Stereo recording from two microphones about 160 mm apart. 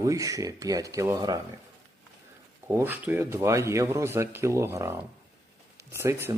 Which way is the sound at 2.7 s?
15° right (ahead or behind).